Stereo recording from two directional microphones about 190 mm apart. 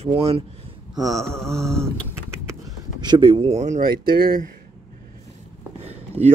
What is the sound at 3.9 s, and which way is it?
Speech, 25° right (ahead or behind).